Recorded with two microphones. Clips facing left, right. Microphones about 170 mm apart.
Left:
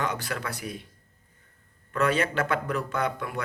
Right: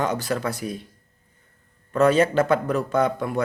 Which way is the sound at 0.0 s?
40° right (ahead or behind).